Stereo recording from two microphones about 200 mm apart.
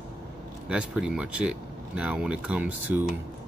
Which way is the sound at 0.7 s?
5° right (ahead or behind).